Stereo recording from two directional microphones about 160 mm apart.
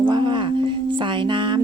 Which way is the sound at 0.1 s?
30° right (ahead or behind).